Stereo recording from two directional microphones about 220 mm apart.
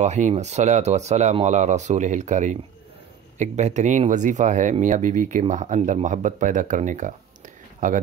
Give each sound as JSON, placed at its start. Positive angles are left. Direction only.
{"t": 0.0, "sound": "speech", "side_deg": -30}